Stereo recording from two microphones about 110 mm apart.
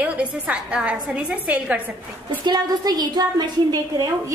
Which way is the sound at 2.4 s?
40° right (ahead or behind).